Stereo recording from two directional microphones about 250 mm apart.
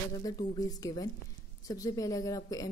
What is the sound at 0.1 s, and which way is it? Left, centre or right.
A woman's voice, centre.